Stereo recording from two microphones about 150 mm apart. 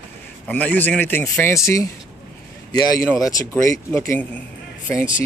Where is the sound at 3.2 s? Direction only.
20° left (ahead or behind).